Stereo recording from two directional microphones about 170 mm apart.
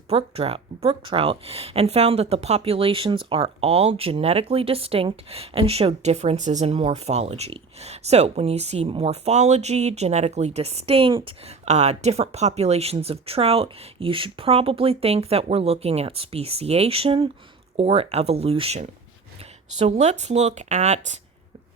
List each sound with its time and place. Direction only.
0.1 s speech: 35° right (ahead or behind)